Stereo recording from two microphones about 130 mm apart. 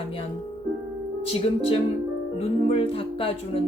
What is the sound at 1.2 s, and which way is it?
Speech, 45° left (ahead or behind).